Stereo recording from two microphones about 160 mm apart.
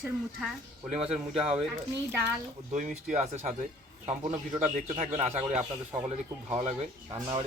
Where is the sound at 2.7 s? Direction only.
50° right (ahead or behind).